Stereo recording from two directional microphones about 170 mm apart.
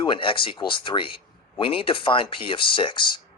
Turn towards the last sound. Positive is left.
turn(degrees=30)  # may be behind; listen again after turning